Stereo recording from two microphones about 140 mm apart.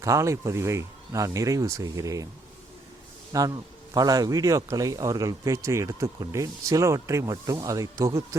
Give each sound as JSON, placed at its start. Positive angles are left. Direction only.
{"t": 0.0, "sound": "a man's voice", "side_deg": -20}
{"t": 3.3, "sound": "a man's voice", "side_deg": -25}